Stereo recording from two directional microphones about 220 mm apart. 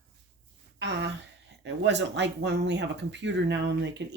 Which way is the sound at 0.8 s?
50° right (ahead or behind).